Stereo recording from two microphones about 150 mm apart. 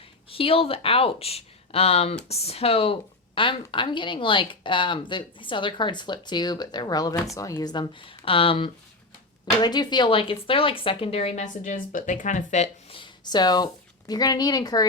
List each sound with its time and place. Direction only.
0.3 s speech: 40° left (ahead or behind)
13.0 s a sound: 30° left (ahead or behind)
14.1 s a woman's voice: 25° left (ahead or behind)